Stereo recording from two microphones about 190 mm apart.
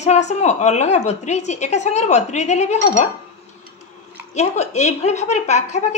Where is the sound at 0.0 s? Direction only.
35° left (ahead or behind).